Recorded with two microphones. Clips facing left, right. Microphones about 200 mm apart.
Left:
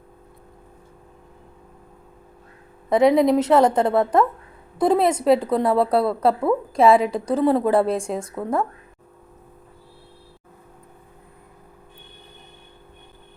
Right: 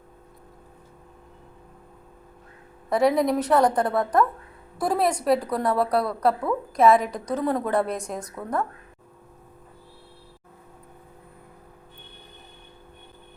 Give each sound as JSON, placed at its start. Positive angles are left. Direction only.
{"t": 2.9, "sound": "a woman's voice", "side_deg": 20}